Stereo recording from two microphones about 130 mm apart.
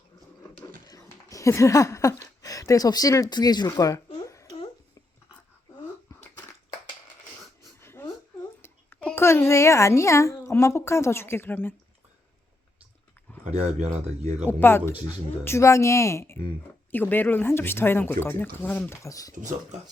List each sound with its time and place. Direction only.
0.9 s a sound: 25° left (ahead or behind)
7.8 s a sound: 20° left (ahead or behind)
8.6 s a woman's voice: 15° left (ahead or behind)
13.4 s speech: 60° right (ahead or behind)
14.6 s speech: 20° left (ahead or behind)
19.0 s speech: 25° left (ahead or behind)